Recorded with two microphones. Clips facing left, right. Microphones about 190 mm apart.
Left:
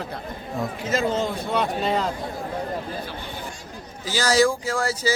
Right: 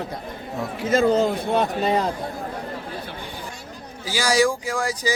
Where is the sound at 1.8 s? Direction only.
15° right (ahead or behind).